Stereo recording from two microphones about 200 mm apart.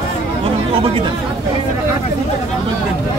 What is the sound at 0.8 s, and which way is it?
Speech, 25° right (ahead or behind).